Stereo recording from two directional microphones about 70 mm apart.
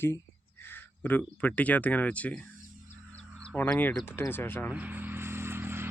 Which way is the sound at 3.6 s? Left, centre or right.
Left.